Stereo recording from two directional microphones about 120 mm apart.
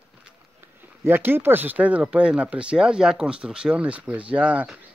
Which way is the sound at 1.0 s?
20° right (ahead or behind).